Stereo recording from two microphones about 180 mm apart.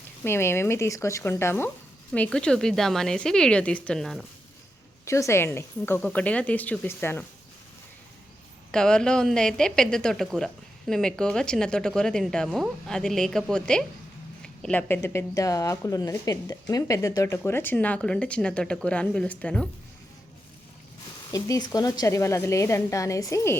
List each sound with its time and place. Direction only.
0.3 s a woman's voice: 15° left (ahead or behind)
5.0 s speech: 15° left (ahead or behind)
8.7 s a woman's voice: 5° left (ahead or behind)
21.3 s speech: 20° left (ahead or behind)